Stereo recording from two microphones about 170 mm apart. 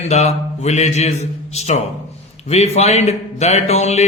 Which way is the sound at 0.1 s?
40° left (ahead or behind).